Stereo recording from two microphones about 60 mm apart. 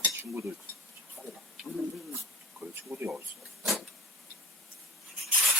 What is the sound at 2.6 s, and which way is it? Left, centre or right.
Speech, right.